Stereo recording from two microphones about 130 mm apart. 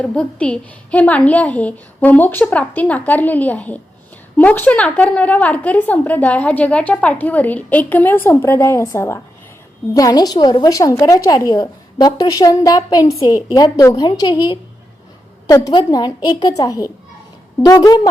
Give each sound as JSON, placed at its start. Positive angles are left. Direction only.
{"t": 0.0, "sound": "a woman's voice", "side_deg": 10}